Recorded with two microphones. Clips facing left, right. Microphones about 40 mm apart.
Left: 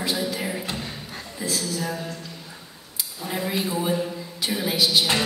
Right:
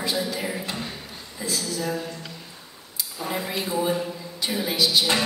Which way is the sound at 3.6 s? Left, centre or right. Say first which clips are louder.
Right 1 dB; centre.